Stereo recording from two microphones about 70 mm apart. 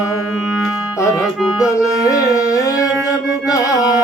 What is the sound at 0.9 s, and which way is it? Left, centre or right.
Music, left.